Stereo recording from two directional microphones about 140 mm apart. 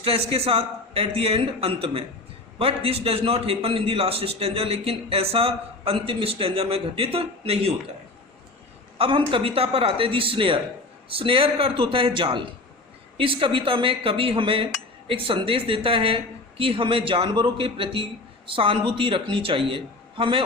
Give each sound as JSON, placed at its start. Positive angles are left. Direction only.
{"t": 0.0, "sound": "a man's voice", "side_deg": -45}
{"t": 9.0, "sound": "speech", "side_deg": -40}